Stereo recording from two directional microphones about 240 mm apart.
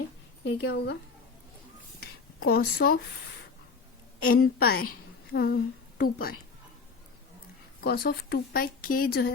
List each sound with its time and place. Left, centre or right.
0.4 s a woman's voice: left
2.4 s speech: left
4.3 s a woman's voice: left
7.8 s speech: left